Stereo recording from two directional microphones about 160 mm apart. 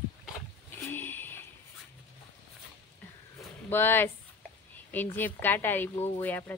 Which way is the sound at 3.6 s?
15° left (ahead or behind).